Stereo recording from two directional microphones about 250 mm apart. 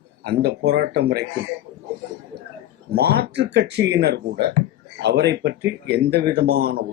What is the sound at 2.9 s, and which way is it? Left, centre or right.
Speech, right.